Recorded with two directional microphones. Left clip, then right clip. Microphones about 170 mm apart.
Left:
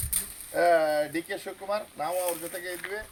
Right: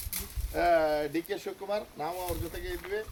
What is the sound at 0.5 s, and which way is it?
Speech, 5° left (ahead or behind).